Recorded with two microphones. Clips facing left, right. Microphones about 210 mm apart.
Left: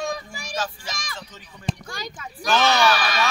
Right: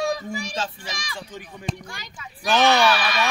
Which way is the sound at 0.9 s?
45° left (ahead or behind).